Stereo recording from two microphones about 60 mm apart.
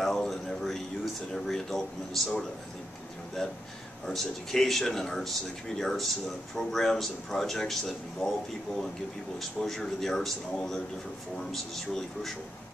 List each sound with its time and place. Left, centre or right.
0.0 s a sound: centre
1.3 s speech: centre
3.4 s speech: centre
9.4 s speech: centre